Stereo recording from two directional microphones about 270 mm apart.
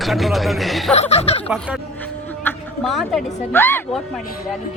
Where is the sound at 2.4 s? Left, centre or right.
Centre.